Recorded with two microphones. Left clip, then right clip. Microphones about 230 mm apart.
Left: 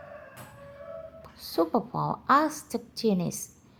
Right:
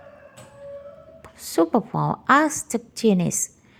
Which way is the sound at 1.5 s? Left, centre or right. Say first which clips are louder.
Right 6 dB; right.